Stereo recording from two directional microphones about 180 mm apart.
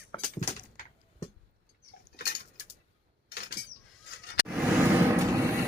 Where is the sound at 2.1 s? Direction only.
60° left (ahead or behind).